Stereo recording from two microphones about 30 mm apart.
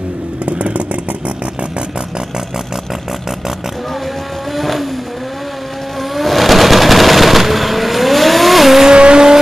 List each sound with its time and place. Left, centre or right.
0.5 s vehicle: right
2.3 s vehicle: centre
3.9 s vehicle: centre
5.9 s machine gun: centre
8.9 s vehicle: right